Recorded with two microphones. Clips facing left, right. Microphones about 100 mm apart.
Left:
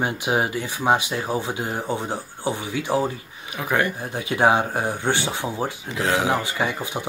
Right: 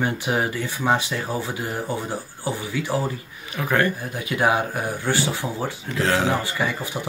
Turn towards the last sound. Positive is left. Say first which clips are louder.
# left 1 dB
turn(degrees=20)  # may be behind; listen again after turning